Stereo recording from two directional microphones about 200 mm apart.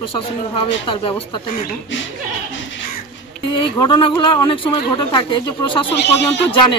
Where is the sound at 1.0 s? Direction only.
25° left (ahead or behind).